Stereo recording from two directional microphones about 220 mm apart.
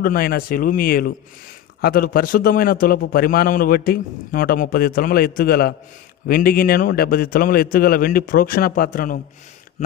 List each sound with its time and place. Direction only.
0.0 s a man's voice: 40° left (ahead or behind)